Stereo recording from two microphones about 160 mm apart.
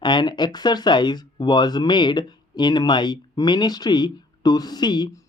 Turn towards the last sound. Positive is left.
turn(degrees=25)  # may be behind; listen again after turning